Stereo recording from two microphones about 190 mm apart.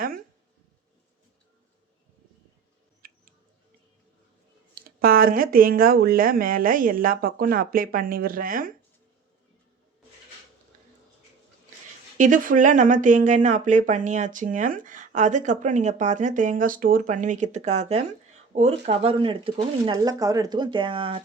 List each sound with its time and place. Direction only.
3.0 s music: 50° right (ahead or behind)
4.7 s speech: 50° right (ahead or behind)
12.1 s speech: 45° right (ahead or behind)